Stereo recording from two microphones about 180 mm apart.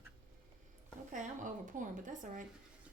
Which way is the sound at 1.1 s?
45° right (ahead or behind).